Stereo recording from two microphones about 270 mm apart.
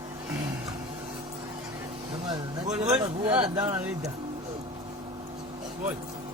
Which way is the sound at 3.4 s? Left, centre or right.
Centre.